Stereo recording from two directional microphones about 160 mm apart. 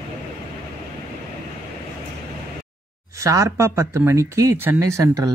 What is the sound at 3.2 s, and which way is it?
Speech, 20° right (ahead or behind).